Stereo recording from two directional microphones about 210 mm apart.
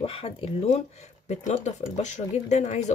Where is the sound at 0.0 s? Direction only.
25° left (ahead or behind).